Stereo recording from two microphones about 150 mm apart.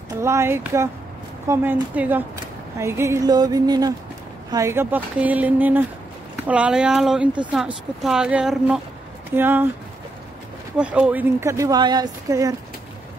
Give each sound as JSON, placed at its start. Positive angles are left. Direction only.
{"t": 0.1, "sound": "speech", "side_deg": -20}
{"t": 10.8, "sound": "speech", "side_deg": -10}